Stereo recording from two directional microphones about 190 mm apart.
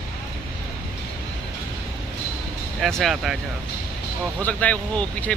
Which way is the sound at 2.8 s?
Centre (ahead or behind).